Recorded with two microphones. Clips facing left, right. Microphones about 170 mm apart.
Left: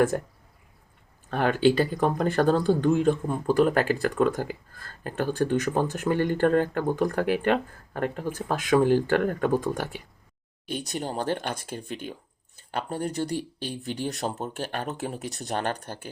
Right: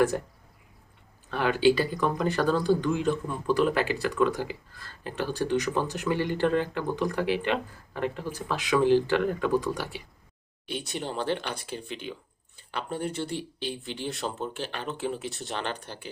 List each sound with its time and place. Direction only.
1.3 s speech: 45° left (ahead or behind)